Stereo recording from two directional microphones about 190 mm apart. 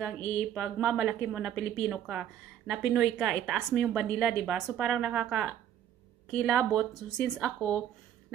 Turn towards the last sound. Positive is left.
turn(degrees=0)  # may be behind; listen again after turning